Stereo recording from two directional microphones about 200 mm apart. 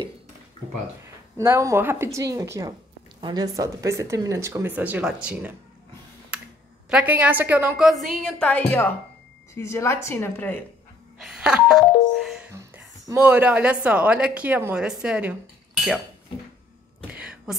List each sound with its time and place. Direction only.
1.0 s a woman's voice: 15° right (ahead or behind)
6.9 s a woman's voice: 5° right (ahead or behind); by 10.6 s 10° left (ahead or behind)
11.1 s a woman's voice: 5° right (ahead or behind)
12.5 s a woman's voice: 15° right (ahead or behind)
17.1 s a sound: 5° right (ahead or behind)